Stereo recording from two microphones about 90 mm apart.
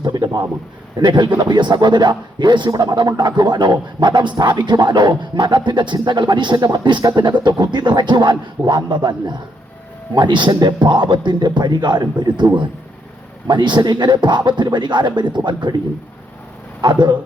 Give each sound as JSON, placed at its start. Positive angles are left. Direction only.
{"t": 0.0, "sound": "a sound", "side_deg": -50}
{"t": 0.9, "sound": "a man's voice", "side_deg": -55}
{"t": 16.8, "sound": "a man's voice", "side_deg": -55}